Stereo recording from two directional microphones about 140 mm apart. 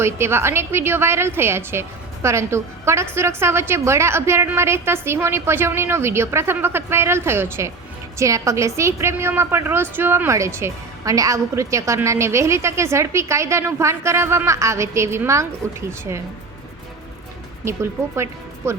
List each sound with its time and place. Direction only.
0.0 s a woman's voice: 20° right (ahead or behind)
18.2 s speech: 20° right (ahead or behind)